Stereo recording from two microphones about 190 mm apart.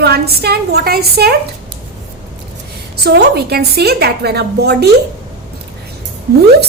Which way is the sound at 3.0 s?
60° right (ahead or behind).